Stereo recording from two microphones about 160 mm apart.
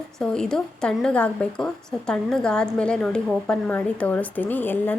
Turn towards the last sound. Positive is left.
turn(degrees=10)  # may be behind; listen again after turning